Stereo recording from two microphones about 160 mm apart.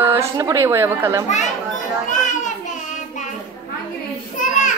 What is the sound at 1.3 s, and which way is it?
Children playing, 50° left (ahead or behind).